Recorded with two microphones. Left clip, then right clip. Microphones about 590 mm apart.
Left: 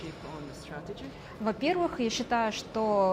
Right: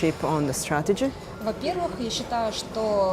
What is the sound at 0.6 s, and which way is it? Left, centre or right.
Speech, right.